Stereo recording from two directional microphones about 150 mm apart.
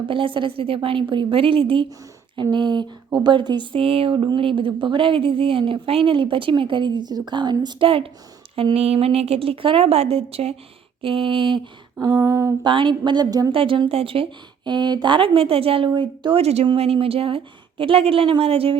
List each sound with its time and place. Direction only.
0.1 s speech: 35° right (ahead or behind)
11.9 s a sound: 25° right (ahead or behind)
12.6 s speech: 35° right (ahead or behind)
13.5 s speech: 35° right (ahead or behind)